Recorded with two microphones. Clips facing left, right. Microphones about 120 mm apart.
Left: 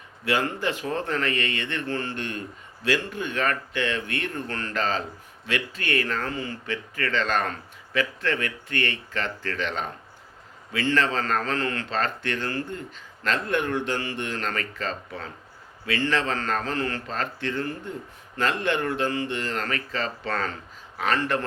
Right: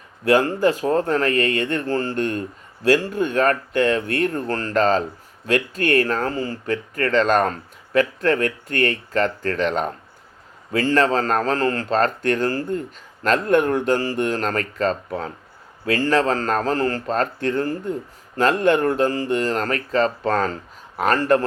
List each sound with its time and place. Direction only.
0.3 s speech: 40° right (ahead or behind)